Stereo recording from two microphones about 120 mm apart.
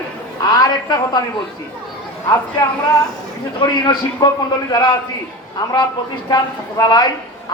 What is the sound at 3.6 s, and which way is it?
A man's voice, 35° left (ahead or behind).